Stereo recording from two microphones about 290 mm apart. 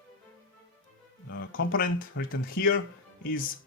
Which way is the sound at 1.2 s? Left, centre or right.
Left.